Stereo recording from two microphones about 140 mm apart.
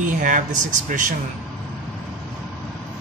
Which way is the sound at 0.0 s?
65° right (ahead or behind).